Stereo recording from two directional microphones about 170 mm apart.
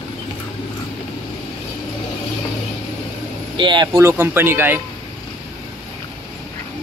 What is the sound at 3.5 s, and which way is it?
Speech, 25° right (ahead or behind).